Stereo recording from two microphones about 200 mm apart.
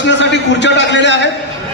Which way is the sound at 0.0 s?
60° left (ahead or behind).